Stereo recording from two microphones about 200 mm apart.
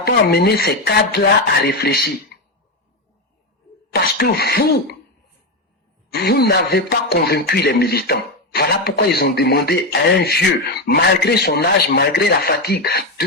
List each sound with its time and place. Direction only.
0.0 s speech: 50° left (ahead or behind)
3.9 s cough: 50° left (ahead or behind)
6.1 s speech: 50° left (ahead or behind)